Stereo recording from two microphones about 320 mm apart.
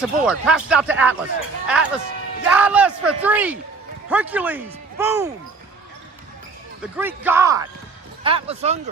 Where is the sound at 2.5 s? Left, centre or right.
Centre.